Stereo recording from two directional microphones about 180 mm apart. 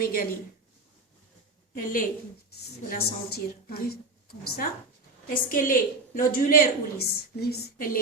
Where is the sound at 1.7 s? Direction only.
50° left (ahead or behind).